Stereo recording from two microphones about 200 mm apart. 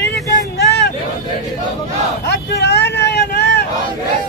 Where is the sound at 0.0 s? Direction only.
60° left (ahead or behind).